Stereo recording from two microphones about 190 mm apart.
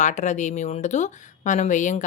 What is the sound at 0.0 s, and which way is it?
Speech, 40° left (ahead or behind).